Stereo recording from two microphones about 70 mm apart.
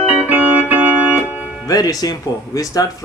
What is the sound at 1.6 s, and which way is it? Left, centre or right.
Speech, left.